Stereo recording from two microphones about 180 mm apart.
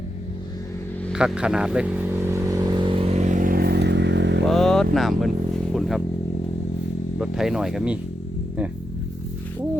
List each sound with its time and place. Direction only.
1.1 s vehicle: 5° right (ahead or behind); by 4.4 s 75° right (ahead or behind)
4.4 s speech: centre (ahead or behind)
5.7 s vehicle: centre (ahead or behind)
7.2 s speech: centre (ahead or behind)